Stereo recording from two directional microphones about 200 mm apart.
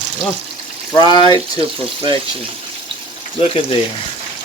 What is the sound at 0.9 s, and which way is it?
Speech, 20° left (ahead or behind).